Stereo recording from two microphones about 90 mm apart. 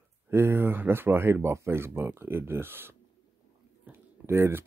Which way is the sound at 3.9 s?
30° right (ahead or behind).